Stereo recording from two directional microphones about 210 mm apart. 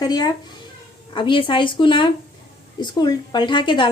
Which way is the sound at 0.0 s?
20° left (ahead or behind).